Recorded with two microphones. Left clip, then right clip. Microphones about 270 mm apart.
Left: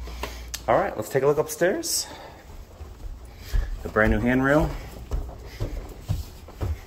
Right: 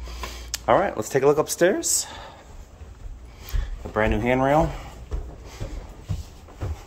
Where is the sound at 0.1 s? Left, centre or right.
Right.